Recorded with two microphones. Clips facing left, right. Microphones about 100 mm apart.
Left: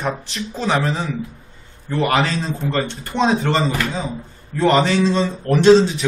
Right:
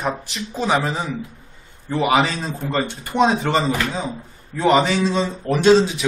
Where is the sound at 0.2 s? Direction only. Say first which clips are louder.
Even; 5° right (ahead or behind).